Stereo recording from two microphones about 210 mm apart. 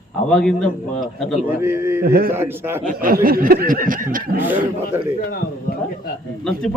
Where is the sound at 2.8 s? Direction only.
40° right (ahead or behind).